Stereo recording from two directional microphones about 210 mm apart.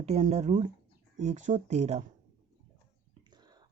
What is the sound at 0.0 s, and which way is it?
Speech, 30° right (ahead or behind).